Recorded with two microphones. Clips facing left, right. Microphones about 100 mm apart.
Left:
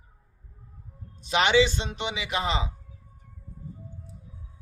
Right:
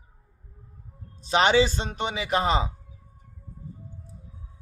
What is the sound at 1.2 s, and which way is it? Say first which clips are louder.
Mantra: right 1 dB; 35° right (ahead or behind).